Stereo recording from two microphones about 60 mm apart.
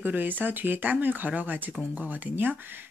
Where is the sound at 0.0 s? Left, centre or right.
Right.